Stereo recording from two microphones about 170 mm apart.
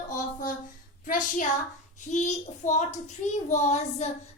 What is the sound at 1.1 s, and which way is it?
A child's voice, 50° left (ahead or behind).